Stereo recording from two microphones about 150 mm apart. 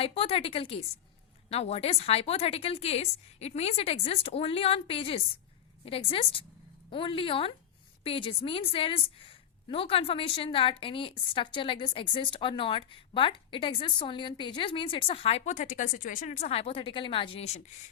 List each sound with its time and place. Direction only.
0.0 s a woman's voice: 40° left (ahead or behind)